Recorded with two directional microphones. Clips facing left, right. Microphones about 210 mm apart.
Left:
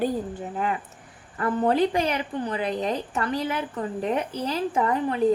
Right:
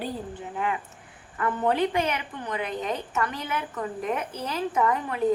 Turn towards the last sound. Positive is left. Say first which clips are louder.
# left 2 dB
turn(degrees=30)  # may be behind; listen again after turning